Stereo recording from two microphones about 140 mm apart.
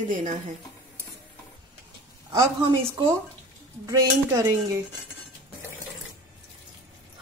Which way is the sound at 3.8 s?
20° right (ahead or behind).